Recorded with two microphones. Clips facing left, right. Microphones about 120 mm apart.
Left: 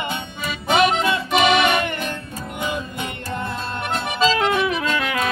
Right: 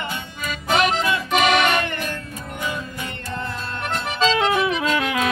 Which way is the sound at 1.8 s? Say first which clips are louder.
Left 1 dB; 20° left (ahead or behind).